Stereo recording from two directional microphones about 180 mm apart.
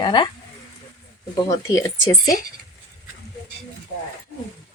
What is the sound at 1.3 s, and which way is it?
Speech, 20° left (ahead or behind).